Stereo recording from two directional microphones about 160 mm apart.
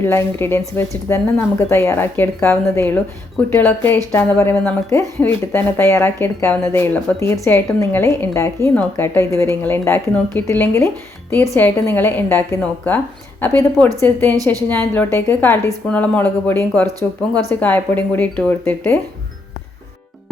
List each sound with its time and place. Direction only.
0.0 s a woman's voice: 15° left (ahead or behind)